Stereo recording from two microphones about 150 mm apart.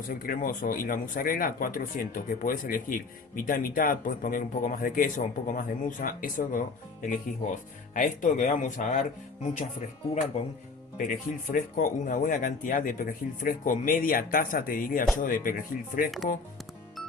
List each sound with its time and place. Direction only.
0.1 s speech: 70° left (ahead or behind)
10.3 s speech: 40° left (ahead or behind)
10.9 s speech: 60° left (ahead or behind)